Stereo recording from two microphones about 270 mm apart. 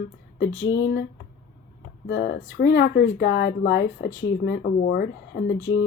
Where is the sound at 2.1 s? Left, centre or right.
Left.